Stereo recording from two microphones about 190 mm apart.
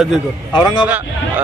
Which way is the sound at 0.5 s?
25° left (ahead or behind).